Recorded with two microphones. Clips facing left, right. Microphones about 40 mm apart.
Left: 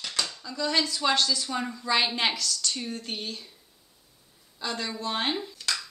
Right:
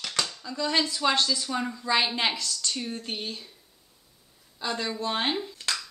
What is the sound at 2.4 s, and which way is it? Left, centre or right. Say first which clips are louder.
Speech: even; centre.